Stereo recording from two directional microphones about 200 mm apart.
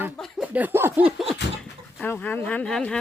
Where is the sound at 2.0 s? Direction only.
10° left (ahead or behind).